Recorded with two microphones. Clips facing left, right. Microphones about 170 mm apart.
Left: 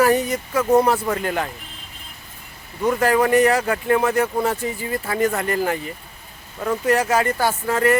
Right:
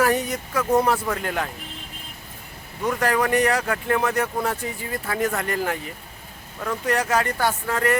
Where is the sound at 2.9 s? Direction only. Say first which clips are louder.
Left 4 dB; 5° left (ahead or behind).